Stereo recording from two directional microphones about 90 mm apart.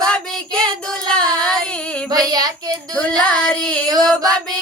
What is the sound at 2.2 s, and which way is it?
Child singing, 45° right (ahead or behind).